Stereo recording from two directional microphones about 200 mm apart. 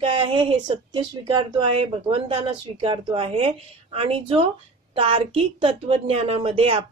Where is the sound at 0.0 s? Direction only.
25° right (ahead or behind).